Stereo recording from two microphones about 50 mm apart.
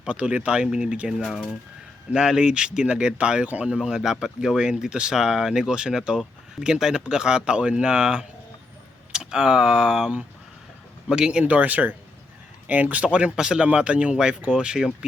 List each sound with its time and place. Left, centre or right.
0.0 s speech: right
3.4 s speech: right
3.7 s speech: centre
11.1 s speech: centre
11.4 s speech: right; by 14.9 s centre